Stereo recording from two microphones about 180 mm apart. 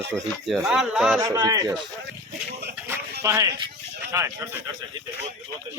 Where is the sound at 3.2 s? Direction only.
15° right (ahead or behind).